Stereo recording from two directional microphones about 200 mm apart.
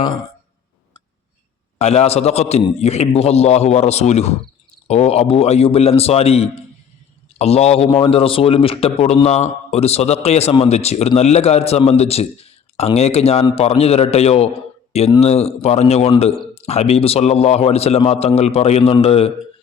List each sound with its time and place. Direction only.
1.8 s a man's voice: 30° left (ahead or behind)